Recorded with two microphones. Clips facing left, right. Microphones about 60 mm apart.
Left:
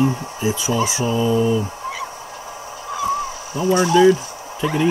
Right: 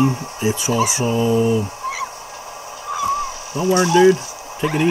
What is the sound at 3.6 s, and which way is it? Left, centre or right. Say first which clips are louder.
Speech: even; centre.